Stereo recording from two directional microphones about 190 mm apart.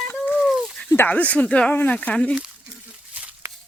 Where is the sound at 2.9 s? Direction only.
10° right (ahead or behind).